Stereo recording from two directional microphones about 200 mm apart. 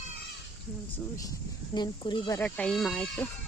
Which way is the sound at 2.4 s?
5° left (ahead or behind).